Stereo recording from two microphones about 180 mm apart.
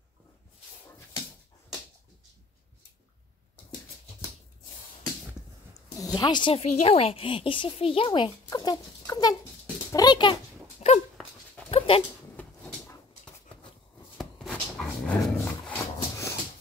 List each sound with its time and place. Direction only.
5.9 s a child's voice: 20° left (ahead or behind)
11.2 s dog: centre (ahead or behind)
11.7 s dog: 30° left (ahead or behind)
12.4 s dog: 10° left (ahead or behind)